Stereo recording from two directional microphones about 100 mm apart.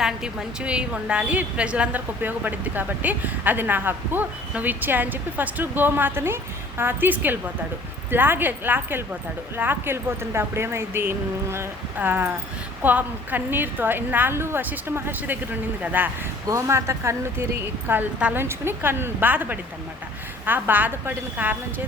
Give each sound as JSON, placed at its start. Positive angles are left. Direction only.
{"t": 0.0, "sound": "a woman's voice", "side_deg": -5}
{"t": 16.5, "sound": "speech", "side_deg": -30}
{"t": 17.8, "sound": "speech", "side_deg": -15}